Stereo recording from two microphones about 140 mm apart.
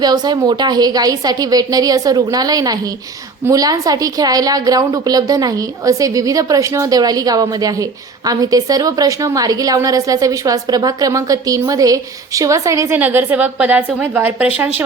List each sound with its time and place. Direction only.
0.0 s a woman's voice: 30° right (ahead or behind)
13.0 s a woman's voice: 10° right (ahead or behind)